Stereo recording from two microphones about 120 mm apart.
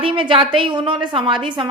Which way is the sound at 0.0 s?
45° right (ahead or behind).